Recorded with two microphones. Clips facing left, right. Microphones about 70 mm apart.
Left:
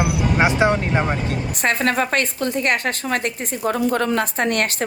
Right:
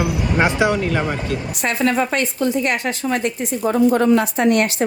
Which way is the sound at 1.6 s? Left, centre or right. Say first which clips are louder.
Right 1 dB; left.